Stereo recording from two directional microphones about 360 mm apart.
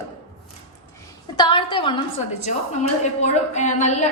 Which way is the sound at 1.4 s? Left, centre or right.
Centre.